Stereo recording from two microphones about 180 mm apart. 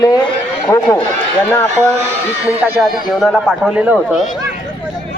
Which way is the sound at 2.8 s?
Centre (ahead or behind).